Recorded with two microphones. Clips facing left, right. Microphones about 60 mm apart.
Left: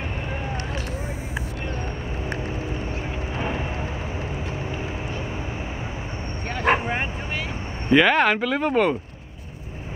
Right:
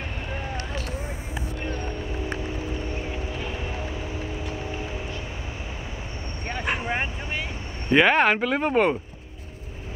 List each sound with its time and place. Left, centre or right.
3.3 s vehicle: left
6.6 s vehicle: left
7.9 s speech: centre